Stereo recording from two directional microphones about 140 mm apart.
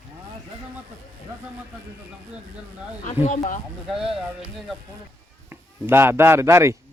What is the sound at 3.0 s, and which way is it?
Speech, 50° left (ahead or behind).